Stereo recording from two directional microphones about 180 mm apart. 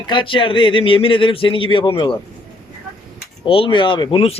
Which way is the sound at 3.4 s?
30° left (ahead or behind).